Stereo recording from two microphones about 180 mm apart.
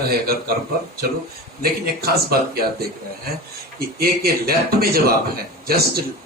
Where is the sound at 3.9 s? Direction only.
60° right (ahead or behind).